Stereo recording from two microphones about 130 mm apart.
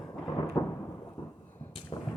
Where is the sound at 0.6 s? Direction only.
25° left (ahead or behind).